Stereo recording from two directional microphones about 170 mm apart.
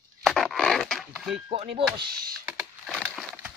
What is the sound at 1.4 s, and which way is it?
Speech, 35° right (ahead or behind).